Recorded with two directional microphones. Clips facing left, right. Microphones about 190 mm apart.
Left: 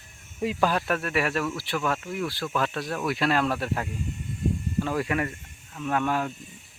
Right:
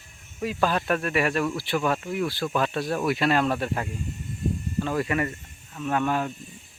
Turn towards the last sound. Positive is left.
turn(degrees=0)  # may be behind; listen again after turning